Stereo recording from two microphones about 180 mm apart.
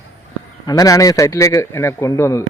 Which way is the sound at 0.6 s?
20° left (ahead or behind).